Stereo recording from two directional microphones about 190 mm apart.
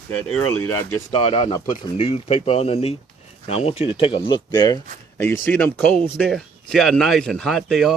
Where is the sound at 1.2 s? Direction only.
25° left (ahead or behind).